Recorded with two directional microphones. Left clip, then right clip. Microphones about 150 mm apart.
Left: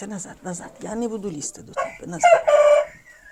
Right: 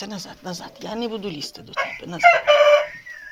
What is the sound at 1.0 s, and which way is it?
Speech, 35° left (ahead or behind).